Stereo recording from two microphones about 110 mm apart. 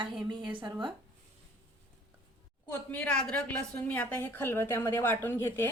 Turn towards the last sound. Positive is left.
turn(degrees=20)  # may be behind; listen again after turning